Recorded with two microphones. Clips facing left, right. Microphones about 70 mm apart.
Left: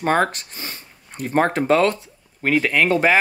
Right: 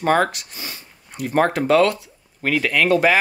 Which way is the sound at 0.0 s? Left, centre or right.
Left.